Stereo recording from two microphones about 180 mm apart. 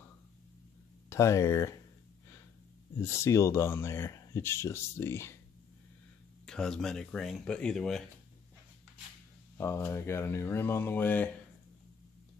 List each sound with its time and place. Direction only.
1.1 s speech: 15° left (ahead or behind)
3.0 s speech: 15° left (ahead or behind)
6.4 s speech: 5° left (ahead or behind)
9.6 s speech: 15° left (ahead or behind)